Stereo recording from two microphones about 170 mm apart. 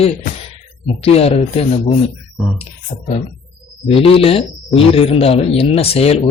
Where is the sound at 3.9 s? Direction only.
35° left (ahead or behind).